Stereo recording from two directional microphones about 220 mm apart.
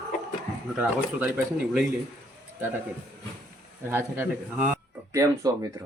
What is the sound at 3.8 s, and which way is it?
Speech, 10° right (ahead or behind).